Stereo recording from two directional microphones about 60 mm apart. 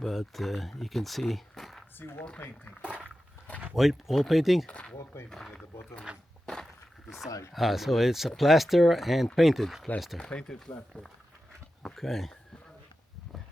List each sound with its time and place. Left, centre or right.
0.0 s speech: centre
2.0 s speech: left
3.8 s speech: centre
5.1 s speech: left
6.1 s speech: centre
6.4 s a sound: centre
7.3 s speech: left
7.5 s speech: centre
10.2 s speech: centre
11.9 s speech: centre